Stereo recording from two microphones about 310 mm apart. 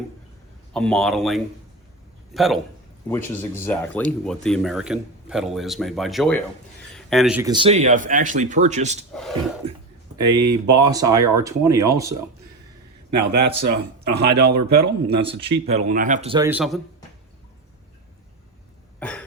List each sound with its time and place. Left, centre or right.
0.7 s speech: centre; by 9.0 s right
10.2 s speech: centre
13.1 s speech: right
15.2 s speech: centre
18.9 s cough: centre